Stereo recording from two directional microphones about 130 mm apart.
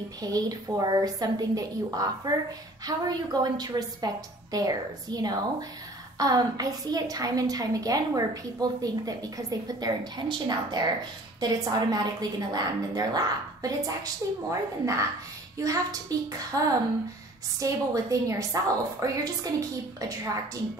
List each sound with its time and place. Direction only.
0.2 s a woman's voice: 30° right (ahead or behind)
17.6 s a woman's voice: 25° right (ahead or behind)